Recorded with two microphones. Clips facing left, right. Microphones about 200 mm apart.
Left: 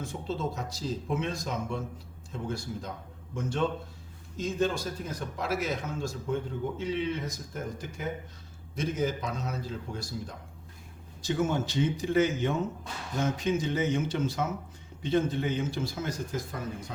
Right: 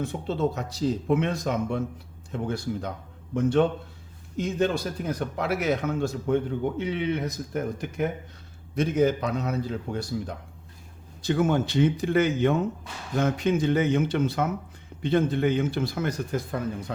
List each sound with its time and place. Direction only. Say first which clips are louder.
0.0 s a man's voice: right 7 dB; 65° right (ahead or behind)